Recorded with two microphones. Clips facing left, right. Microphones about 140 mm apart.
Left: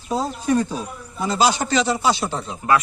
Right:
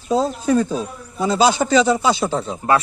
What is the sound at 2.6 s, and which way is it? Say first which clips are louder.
Speech: right 1 dB; 35° right (ahead or behind).